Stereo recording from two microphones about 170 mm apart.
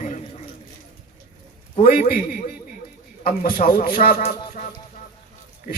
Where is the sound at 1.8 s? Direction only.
55° left (ahead or behind).